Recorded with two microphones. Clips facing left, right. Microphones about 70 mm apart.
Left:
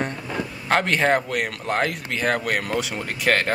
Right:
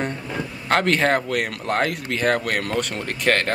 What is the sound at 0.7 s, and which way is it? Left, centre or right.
Speech, centre.